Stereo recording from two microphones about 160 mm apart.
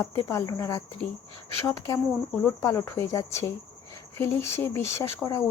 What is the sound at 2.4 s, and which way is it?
Speech, 20° left (ahead or behind).